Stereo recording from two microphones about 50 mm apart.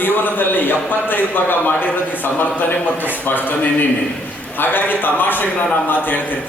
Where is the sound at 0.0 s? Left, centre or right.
Left.